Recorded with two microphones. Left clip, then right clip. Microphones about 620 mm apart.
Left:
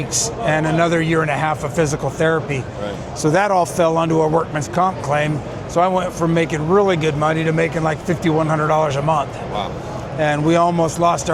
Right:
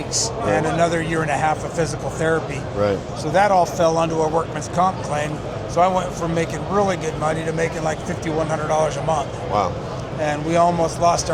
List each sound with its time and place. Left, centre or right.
0.1 s a man's voice: left